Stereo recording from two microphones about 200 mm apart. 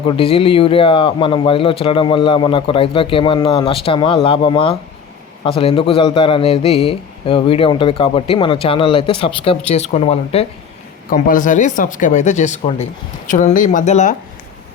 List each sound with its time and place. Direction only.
0.1 s a man's voice: 25° left (ahead or behind)
11.1 s speech: 40° left (ahead or behind)